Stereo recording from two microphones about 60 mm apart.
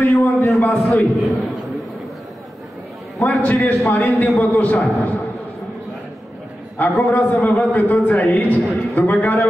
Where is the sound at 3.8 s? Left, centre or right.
Centre.